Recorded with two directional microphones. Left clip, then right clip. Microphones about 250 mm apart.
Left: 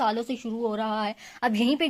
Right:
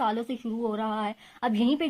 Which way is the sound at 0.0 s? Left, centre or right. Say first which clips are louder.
Left 2 dB; left.